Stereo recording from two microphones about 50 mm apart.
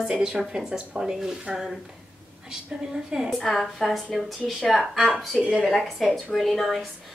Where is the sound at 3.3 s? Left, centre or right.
Centre.